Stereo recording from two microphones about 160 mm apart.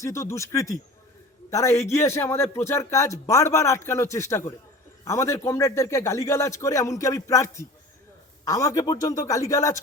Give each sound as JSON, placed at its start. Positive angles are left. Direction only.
{"t": 0.0, "sound": "a man's voice", "side_deg": 20}